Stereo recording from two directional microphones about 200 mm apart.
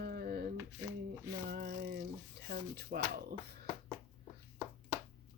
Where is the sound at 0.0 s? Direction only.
50° right (ahead or behind).